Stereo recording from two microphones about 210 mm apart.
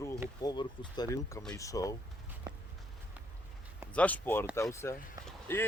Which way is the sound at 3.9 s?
5° left (ahead or behind).